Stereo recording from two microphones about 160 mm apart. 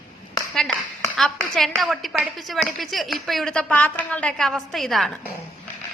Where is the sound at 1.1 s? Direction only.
Centre (ahead or behind).